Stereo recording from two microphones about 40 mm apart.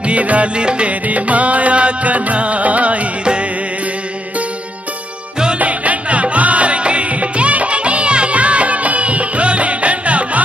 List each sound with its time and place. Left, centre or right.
0.0 s music: right
1.0 s music: right
5.6 s music: right